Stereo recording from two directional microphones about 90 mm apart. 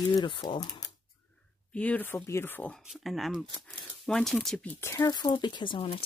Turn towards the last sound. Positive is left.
turn(degrees=75)  # may be behind; listen again after turning